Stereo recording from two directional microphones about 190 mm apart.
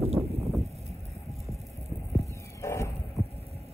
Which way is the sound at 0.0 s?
35° right (ahead or behind).